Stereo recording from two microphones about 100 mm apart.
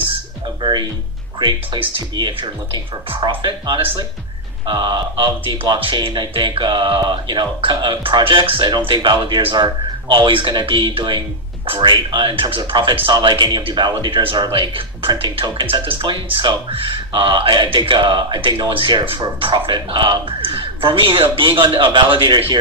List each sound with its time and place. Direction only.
0.6 s speech: 55° right (ahead or behind)
4.6 s speech: 50° right (ahead or behind)